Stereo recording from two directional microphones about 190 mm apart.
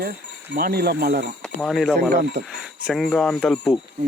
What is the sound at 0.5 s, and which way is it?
Speech, 55° right (ahead or behind).